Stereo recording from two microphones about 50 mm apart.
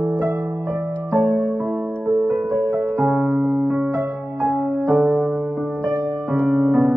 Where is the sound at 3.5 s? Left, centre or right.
Centre.